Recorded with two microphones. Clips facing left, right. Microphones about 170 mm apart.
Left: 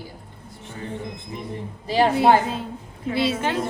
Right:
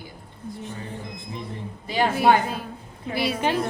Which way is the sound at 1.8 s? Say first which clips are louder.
Left 3 dB; 30° left (ahead or behind).